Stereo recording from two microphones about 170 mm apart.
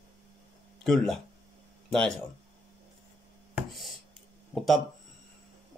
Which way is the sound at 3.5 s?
Centre (ahead or behind).